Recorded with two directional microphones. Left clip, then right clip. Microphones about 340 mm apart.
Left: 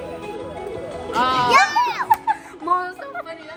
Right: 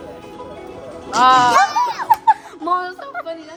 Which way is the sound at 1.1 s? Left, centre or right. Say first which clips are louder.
Right 7 dB; right.